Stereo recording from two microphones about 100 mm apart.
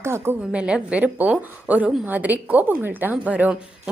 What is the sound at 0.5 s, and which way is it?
A woman's voice, 10° right (ahead or behind).